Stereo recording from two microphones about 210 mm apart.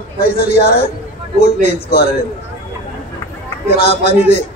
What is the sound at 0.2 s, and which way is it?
A man's voice, 45° left (ahead or behind).